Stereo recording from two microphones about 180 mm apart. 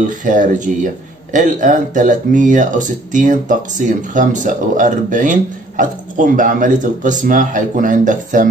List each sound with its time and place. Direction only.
0.0 s speech: 45° right (ahead or behind)